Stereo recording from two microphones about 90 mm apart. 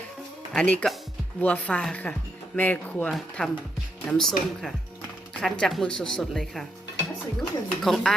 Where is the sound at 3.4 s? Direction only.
5° left (ahead or behind).